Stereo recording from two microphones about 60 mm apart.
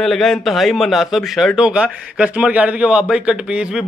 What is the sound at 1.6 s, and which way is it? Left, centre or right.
A man's voice, centre.